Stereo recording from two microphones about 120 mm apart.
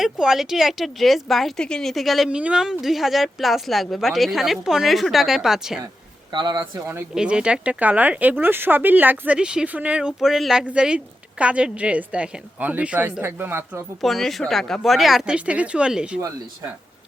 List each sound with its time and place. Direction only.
0.0 s speech: 5° right (ahead or behind)
6.3 s speech: 35° right (ahead or behind)
7.1 s speech: 5° right (ahead or behind)
14.0 s speech: centre (ahead or behind)